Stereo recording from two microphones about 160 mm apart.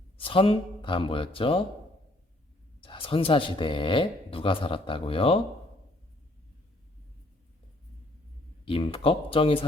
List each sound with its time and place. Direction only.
0.2 s speech: 35° left (ahead or behind)
2.8 s speech: 35° left (ahead or behind)
8.6 s speech: 35° left (ahead or behind)